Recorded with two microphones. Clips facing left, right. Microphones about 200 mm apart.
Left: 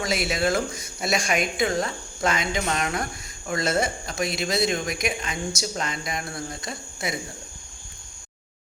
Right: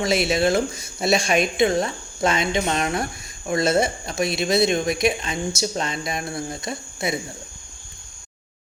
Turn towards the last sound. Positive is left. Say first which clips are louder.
# right 5 dB
turn(degrees=-25)  # may be behind; listen again after turning